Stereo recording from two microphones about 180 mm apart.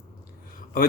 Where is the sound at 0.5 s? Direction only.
50° left (ahead or behind).